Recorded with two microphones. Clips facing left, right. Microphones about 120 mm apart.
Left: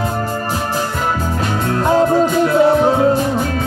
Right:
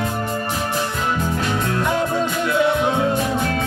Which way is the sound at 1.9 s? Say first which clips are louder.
Left 12 dB; 30° left (ahead or behind).